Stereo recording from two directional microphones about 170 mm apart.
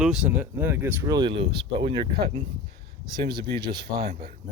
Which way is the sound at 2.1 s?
65° right (ahead or behind).